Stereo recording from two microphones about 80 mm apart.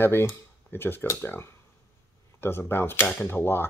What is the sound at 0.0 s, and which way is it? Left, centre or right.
Speech, left.